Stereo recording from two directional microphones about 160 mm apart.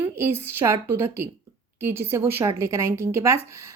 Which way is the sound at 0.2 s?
15° right (ahead or behind).